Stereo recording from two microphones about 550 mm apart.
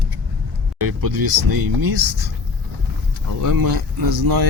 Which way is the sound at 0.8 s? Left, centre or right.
Right.